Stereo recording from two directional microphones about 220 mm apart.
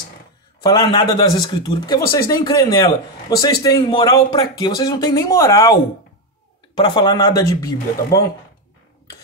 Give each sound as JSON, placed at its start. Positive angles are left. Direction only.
{"t": 0.6, "sound": "speech", "side_deg": 20}
{"t": 6.8, "sound": "speech", "side_deg": 20}